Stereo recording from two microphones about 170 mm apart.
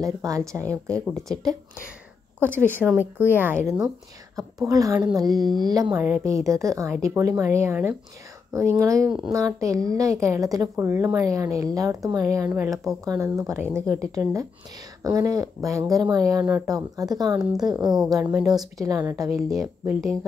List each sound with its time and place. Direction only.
0.0 s a woman's voice: 20° right (ahead or behind)
2.4 s a woman's voice: 15° right (ahead or behind)
5.9 s a woman's voice: 10° right (ahead or behind)
18.2 s a woman's voice: 10° right (ahead or behind)
18.5 s a woman's voice: 20° right (ahead or behind)